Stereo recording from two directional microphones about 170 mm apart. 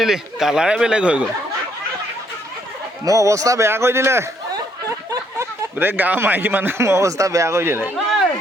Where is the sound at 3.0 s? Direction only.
20° right (ahead or behind).